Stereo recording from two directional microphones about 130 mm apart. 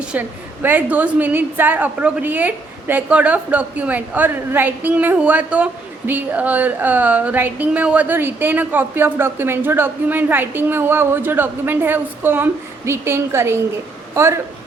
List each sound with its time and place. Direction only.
0.1 s a woman's voice: 15° right (ahead or behind)